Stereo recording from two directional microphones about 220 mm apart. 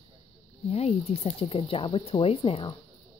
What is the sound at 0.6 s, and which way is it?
Speech, 30° left (ahead or behind).